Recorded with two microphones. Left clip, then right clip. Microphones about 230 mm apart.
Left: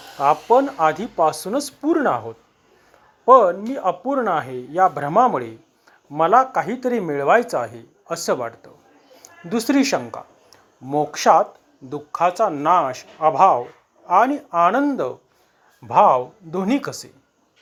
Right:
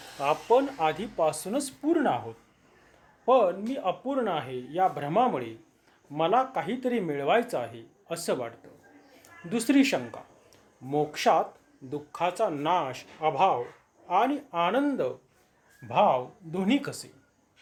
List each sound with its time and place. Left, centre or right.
0.2 s speech: centre
3.2 s speech: centre